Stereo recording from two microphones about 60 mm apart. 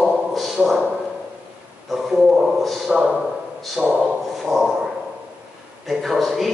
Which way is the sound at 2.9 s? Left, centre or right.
Centre.